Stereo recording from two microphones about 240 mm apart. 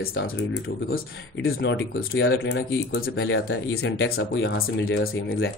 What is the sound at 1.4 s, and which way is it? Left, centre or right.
Speech, left.